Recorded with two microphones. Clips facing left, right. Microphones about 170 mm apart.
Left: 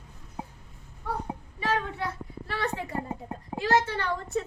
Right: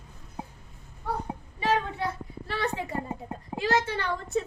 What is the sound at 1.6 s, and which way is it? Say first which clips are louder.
Child singing: right 3 dB; 20° right (ahead or behind).